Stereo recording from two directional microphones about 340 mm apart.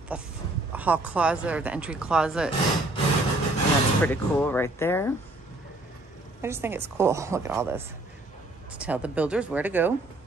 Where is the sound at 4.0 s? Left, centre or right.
Centre.